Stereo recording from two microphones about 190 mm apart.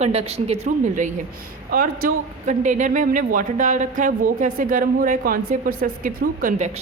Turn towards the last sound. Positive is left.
turn(degrees=-40)  # may be behind; listen again after turning